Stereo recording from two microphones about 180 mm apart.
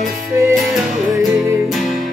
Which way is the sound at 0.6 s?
Centre (ahead or behind).